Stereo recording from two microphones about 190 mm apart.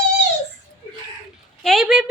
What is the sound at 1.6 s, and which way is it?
Speech, centre (ahead or behind).